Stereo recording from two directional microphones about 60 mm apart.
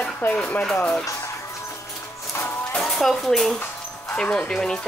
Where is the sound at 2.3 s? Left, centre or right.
Left.